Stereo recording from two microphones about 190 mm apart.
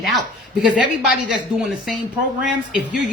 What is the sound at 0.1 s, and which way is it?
Speech, 5° right (ahead or behind).